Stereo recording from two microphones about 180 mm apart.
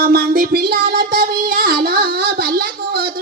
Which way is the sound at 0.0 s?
55° right (ahead or behind).